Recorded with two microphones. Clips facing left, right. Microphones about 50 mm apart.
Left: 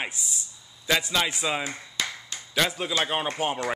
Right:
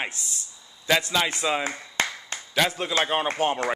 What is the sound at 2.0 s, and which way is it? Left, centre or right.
Finger snapping, right.